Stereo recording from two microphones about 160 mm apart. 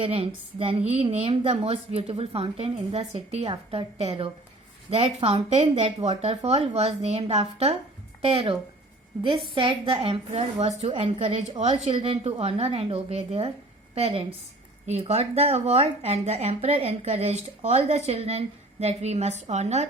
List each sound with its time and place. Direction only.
0.0 s a woman's voice: 35° right (ahead or behind)
9.6 s a woman's voice: 30° right (ahead or behind)